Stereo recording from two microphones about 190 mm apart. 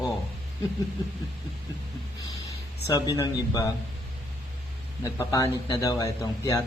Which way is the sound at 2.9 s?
20° left (ahead or behind).